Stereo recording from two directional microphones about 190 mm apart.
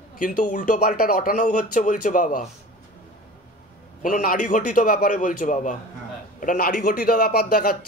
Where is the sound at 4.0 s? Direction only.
45° left (ahead or behind).